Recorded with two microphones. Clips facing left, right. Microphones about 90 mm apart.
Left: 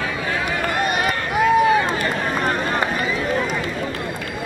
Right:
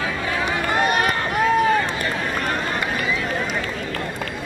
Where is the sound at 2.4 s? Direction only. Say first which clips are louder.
Left 3 dB; 35° left (ahead or behind).